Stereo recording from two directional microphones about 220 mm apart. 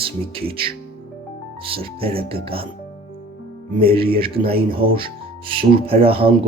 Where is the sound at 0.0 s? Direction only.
25° right (ahead or behind).